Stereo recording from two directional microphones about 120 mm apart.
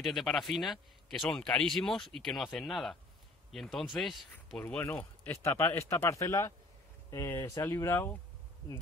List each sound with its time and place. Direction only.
0.0 s speech: centre (ahead or behind)
4.6 s speech: 10° left (ahead or behind)